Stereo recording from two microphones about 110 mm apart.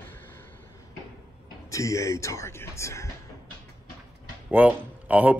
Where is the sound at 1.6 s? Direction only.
30° left (ahead or behind).